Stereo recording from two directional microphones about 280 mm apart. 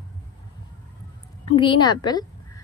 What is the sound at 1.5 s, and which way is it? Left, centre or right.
Speech, centre.